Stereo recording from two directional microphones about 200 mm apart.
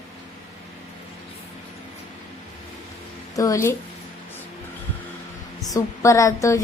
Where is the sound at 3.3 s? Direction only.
15° left (ahead or behind).